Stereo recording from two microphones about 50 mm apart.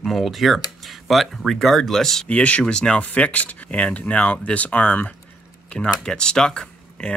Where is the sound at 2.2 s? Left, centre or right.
Left.